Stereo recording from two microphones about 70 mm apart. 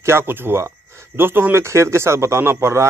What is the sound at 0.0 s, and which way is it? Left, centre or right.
A man's voice, right.